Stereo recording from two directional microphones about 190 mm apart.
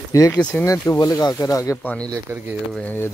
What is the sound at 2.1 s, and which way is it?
Speech, 10° right (ahead or behind).